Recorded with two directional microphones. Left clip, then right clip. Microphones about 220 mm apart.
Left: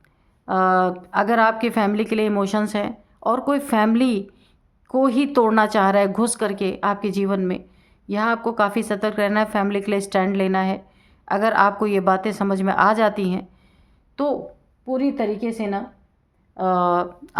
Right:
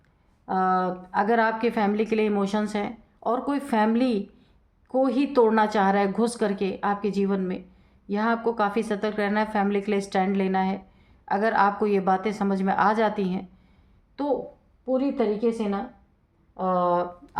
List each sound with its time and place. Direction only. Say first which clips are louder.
0.4 s a woman's voice: left 5 dB; 40° left (ahead or behind)